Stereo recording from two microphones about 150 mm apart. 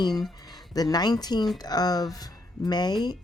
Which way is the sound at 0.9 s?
25° left (ahead or behind).